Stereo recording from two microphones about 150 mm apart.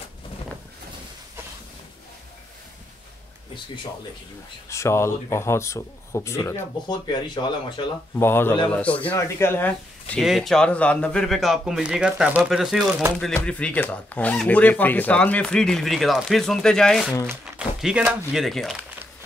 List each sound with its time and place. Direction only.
4.6 s speech: 20° left (ahead or behind)
6.9 s speech: 30° left (ahead or behind)
8.2 s a man's voice: 15° left (ahead or behind)
17.6 s a sound: 5° right (ahead or behind)
18.3 s a man's voice: centre (ahead or behind)